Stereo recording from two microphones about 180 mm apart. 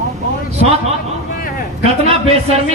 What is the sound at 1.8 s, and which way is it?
Speech, 35° right (ahead or behind).